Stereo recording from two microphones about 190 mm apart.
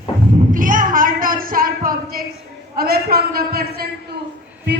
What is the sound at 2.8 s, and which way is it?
A man's voice, 55° right (ahead or behind).